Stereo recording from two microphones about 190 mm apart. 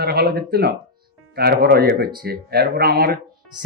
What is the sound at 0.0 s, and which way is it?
Speech, 55° right (ahead or behind).